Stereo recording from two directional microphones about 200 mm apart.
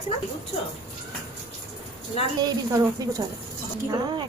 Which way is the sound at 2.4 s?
20° right (ahead or behind).